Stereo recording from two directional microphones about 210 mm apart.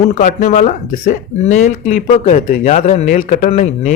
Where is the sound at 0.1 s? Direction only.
35° left (ahead or behind).